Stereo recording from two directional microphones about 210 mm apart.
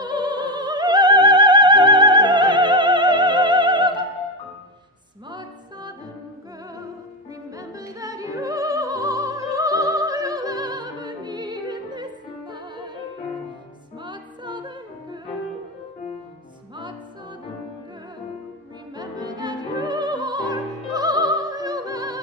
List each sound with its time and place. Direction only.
0.0 s opera: 20° right (ahead or behind)
5.3 s music: 20° right (ahead or behind)
7.5 s music: 15° right (ahead or behind)
14.0 s music: 20° right (ahead or behind)
18.9 s music: 20° right (ahead or behind)